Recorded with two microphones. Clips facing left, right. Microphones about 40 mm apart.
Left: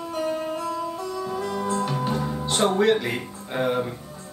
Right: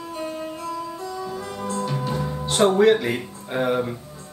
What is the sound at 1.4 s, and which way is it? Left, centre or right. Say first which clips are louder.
Music: left 3 dB; centre.